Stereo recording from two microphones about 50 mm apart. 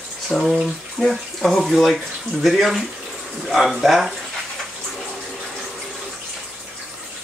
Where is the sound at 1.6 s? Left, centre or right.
Centre.